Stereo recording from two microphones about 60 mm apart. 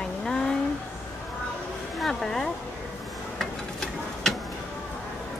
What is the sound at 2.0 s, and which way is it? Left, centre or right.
Speech, centre.